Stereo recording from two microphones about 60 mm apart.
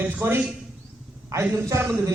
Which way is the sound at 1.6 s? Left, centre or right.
Right.